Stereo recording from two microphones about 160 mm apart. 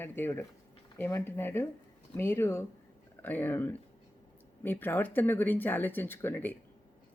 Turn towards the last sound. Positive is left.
turn(degrees=10)  # may be behind; listen again after turning